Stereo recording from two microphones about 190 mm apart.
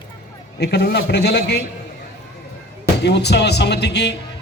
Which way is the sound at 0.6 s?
60° left (ahead or behind).